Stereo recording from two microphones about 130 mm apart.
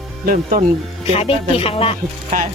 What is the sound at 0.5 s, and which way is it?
Speech, 90° right.